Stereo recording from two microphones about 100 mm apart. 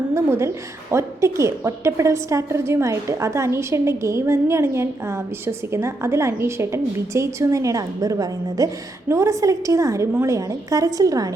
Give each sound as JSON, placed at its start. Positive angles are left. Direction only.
{"t": 0.1, "sound": "a woman's voice", "side_deg": -30}